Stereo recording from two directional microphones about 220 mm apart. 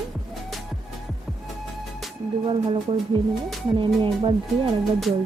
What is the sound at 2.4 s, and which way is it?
Speech, 25° right (ahead or behind).